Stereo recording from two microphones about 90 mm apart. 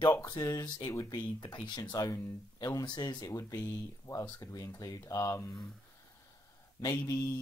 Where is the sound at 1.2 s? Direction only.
60° left (ahead or behind).